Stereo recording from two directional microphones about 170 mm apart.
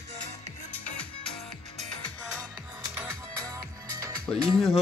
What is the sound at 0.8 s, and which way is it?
Music, 10° left (ahead or behind).